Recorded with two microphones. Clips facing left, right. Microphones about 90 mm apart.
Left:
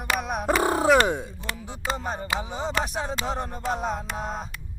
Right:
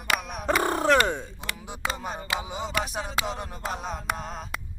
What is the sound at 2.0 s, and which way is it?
Music, 30° left (ahead or behind).